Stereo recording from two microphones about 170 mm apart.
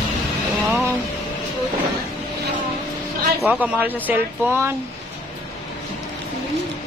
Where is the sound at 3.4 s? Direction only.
10° right (ahead or behind).